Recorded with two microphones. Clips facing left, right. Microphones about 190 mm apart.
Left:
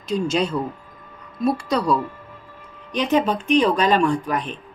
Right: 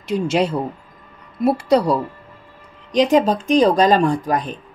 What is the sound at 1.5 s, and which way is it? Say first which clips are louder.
Speech: right 7 dB; 30° right (ahead or behind).